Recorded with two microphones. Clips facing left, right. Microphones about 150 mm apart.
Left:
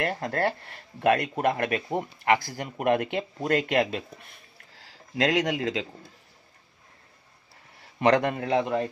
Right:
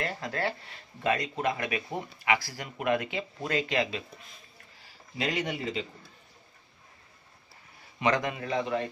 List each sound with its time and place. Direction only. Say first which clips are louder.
0.0 s speech: left 5 dB; 55° left (ahead or behind); by 5.9 s 90° left
8.0 s speech: left 6 dB; 60° left (ahead or behind)